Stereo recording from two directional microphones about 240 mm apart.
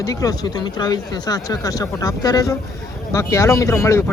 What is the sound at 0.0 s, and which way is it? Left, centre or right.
Speech, centre.